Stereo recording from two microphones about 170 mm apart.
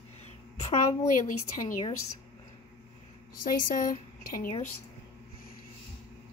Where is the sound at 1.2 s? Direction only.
50° left (ahead or behind).